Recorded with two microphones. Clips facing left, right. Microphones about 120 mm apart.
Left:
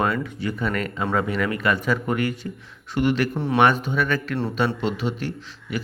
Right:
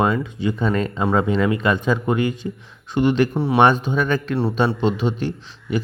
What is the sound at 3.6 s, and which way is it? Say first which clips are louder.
A man's voice: right 2 dB; 20° right (ahead or behind).